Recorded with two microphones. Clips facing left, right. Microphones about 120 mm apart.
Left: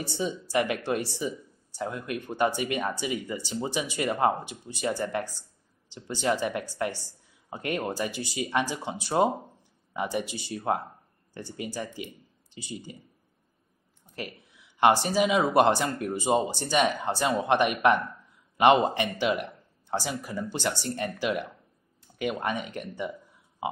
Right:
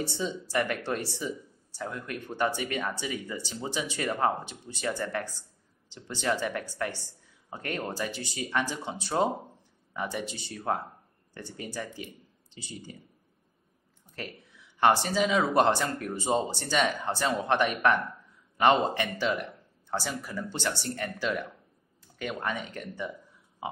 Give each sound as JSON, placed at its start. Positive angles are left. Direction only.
{"t": 0.0, "sound": "speech", "side_deg": 15}
{"t": 14.1, "sound": "speech", "side_deg": 15}